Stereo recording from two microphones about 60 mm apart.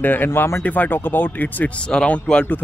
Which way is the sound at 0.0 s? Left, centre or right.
Left.